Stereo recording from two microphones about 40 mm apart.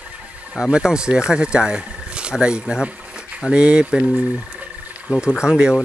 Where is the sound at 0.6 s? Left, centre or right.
Centre.